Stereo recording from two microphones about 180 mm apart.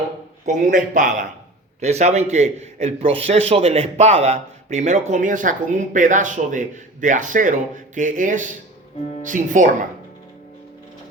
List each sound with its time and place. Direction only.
0.4 s a man's voice: 45° right (ahead or behind)